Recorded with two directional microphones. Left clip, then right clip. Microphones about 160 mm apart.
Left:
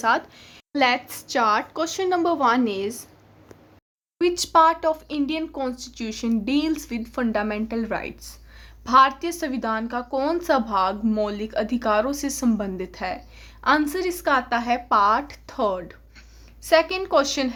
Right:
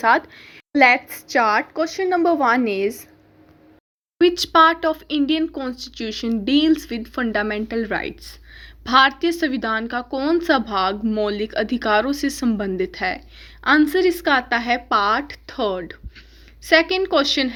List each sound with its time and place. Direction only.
0.4 s a woman's voice: 20° right (ahead or behind)
4.2 s speech: 10° right (ahead or behind)